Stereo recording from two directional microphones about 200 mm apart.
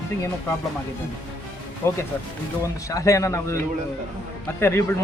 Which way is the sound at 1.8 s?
15° left (ahead or behind).